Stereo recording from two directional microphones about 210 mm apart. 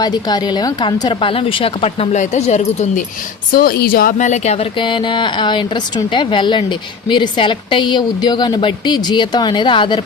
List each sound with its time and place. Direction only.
0.0 s speech: 20° left (ahead or behind)
3.5 s speech: 45° left (ahead or behind); by 10.0 s 25° left (ahead or behind)